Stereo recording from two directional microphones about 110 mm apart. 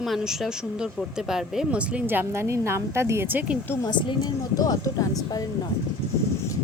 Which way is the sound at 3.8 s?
40° left (ahead or behind).